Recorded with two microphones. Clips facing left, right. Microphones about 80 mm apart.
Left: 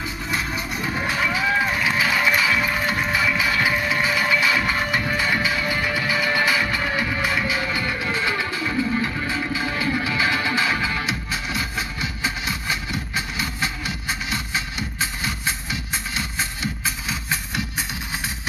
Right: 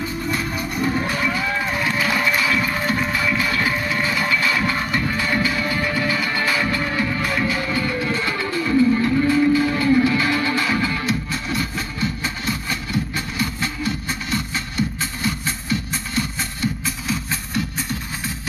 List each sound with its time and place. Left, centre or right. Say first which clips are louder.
0.3 s music: even; centre